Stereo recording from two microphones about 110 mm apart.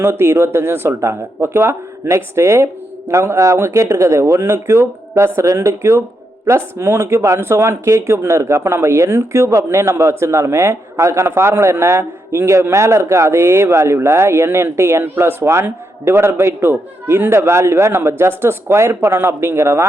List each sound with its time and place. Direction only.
0.0 s speech: 20° right (ahead or behind)